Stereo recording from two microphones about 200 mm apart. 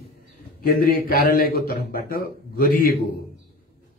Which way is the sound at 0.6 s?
45° left (ahead or behind).